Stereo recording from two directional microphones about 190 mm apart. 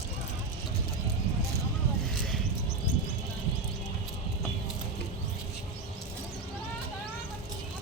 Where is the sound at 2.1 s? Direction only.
Centre (ahead or behind).